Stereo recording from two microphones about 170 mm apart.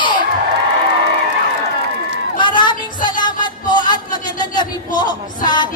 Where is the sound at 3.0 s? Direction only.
25° left (ahead or behind).